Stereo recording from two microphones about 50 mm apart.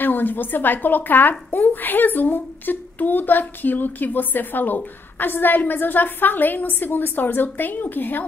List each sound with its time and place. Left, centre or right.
0.0 s a woman's voice: left